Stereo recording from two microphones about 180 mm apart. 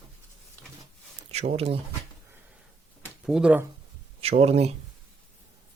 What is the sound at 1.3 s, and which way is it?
Speech, 35° right (ahead or behind).